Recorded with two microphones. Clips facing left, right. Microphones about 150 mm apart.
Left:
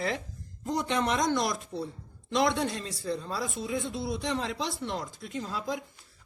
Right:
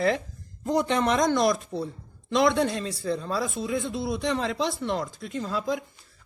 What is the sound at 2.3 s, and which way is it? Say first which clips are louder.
A man's voice: right 5 dB; 90° right.